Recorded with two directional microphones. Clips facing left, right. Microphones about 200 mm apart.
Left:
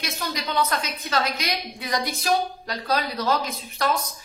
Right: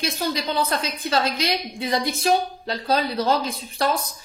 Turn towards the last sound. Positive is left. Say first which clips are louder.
# right 2 dB
turn(degrees=-30)  # may be behind; listen again after turning